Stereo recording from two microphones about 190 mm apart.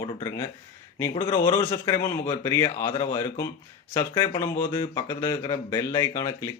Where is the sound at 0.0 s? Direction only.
15° left (ahead or behind).